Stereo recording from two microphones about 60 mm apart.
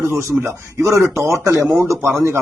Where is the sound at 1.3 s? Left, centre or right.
Right.